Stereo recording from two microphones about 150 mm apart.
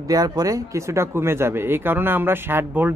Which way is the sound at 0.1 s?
25° right (ahead or behind).